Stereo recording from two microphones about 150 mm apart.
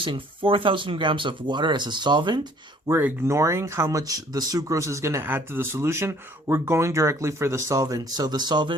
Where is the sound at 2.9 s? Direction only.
15° right (ahead or behind).